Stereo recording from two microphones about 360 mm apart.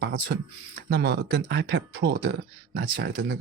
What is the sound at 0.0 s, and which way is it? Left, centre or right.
Speech, right.